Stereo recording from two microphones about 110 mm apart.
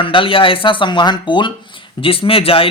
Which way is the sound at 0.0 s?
50° left (ahead or behind).